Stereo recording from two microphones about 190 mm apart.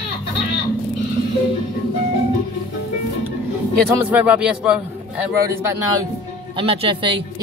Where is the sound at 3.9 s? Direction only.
10° right (ahead or behind).